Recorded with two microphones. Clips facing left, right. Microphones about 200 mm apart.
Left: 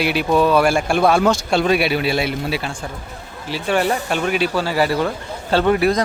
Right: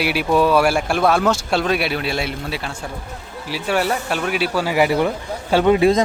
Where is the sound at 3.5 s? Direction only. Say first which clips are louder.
Left 1 dB; 5° right (ahead or behind).